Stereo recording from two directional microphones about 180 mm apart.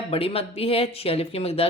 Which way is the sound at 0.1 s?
30° left (ahead or behind).